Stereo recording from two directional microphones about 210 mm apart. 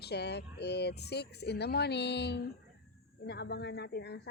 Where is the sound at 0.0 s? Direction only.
50° left (ahead or behind).